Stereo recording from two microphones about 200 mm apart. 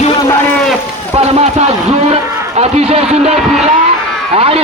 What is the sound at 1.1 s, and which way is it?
Speech, 30° right (ahead or behind).